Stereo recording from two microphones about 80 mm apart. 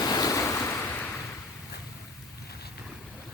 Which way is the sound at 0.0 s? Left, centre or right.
Left.